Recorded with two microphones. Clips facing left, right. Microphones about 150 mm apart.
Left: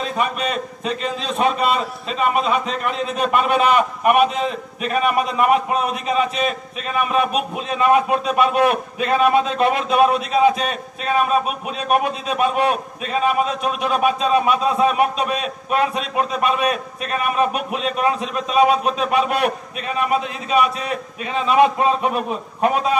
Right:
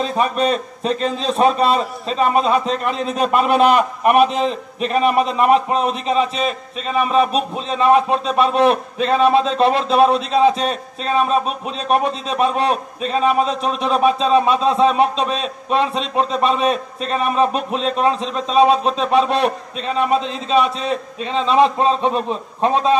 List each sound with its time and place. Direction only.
0.0 s a man's voice: 35° right (ahead or behind)